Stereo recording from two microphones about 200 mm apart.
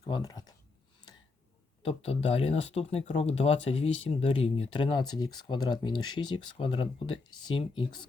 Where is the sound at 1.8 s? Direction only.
30° left (ahead or behind).